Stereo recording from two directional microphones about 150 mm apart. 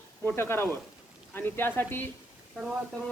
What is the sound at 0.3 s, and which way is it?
Speech, 15° left (ahead or behind).